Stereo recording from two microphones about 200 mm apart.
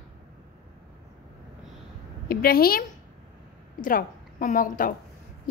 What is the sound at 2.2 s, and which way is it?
Speech, 50° left (ahead or behind).